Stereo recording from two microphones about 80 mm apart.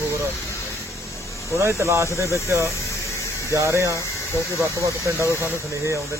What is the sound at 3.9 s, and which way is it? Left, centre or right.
Speech, left.